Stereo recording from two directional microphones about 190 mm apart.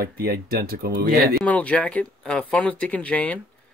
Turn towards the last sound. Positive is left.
turn(degrees=5)  # may be behind; listen again after turning